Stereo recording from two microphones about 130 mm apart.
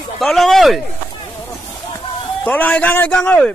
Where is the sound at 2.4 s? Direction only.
10° left (ahead or behind).